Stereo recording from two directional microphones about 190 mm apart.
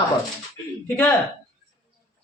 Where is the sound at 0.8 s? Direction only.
10° left (ahead or behind).